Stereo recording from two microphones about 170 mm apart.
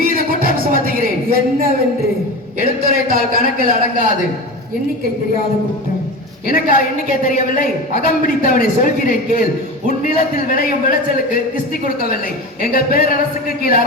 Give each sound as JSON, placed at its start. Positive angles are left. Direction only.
{"t": 0.0, "sound": "a sound", "side_deg": -60}
{"t": 2.6, "sound": "a man's voice", "side_deg": -55}
{"t": 6.5, "sound": "a woman's voice", "side_deg": 55}
{"t": 11.9, "sound": "a woman's voice", "side_deg": 60}